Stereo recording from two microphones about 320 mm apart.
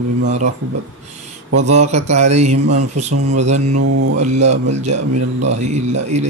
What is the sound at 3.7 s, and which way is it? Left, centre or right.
Speech, right.